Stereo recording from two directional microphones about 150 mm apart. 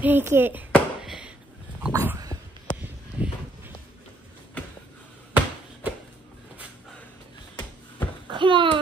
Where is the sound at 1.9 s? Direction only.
20° right (ahead or behind).